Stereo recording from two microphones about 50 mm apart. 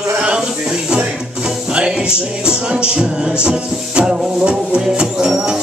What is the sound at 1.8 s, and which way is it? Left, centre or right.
Music, centre.